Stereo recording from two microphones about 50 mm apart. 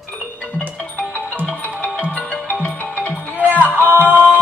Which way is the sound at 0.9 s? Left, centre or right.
Left.